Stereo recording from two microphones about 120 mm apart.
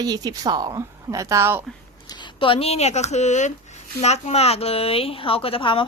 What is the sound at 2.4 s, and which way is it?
A woman's voice, 50° left (ahead or behind).